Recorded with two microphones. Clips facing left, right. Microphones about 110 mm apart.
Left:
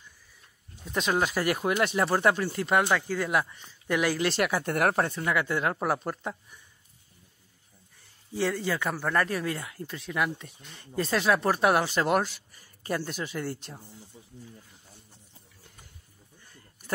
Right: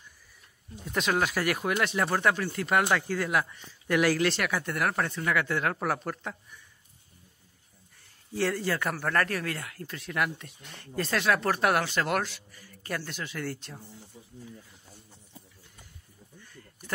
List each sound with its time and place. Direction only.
0.8 s speech: centre (ahead or behind)
1.5 s a man's voice: 20° left (ahead or behind)
2.7 s a man's voice: 5° left (ahead or behind)
4.4 s speech: 30° left (ahead or behind)
5.1 s a man's voice: 15° left (ahead or behind)
8.4 s a man's voice: 5° left (ahead or behind)